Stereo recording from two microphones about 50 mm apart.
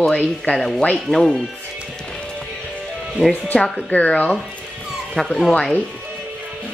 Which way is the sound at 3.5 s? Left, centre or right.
Left.